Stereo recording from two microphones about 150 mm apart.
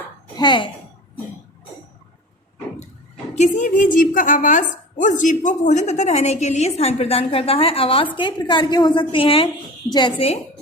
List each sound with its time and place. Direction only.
0.3 s a child's voice: 30° left (ahead or behind)
3.3 s a woman's voice: 50° left (ahead or behind); by 10.3 s 35° left (ahead or behind)